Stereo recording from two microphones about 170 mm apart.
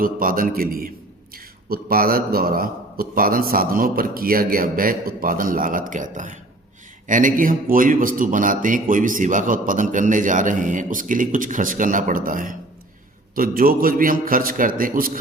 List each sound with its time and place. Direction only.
0.0 s a man's voice: 55° right (ahead or behind)